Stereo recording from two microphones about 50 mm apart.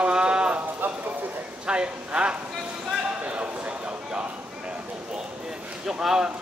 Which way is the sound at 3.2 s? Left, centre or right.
Right.